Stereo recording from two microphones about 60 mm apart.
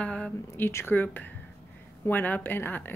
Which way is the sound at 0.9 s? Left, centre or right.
Left.